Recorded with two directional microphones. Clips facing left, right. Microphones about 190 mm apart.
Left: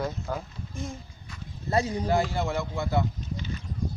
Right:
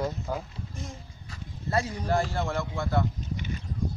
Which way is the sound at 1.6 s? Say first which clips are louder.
Left 3 dB; 20° left (ahead or behind).